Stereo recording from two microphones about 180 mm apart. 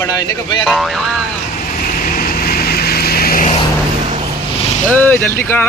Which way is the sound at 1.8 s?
50° left (ahead or behind).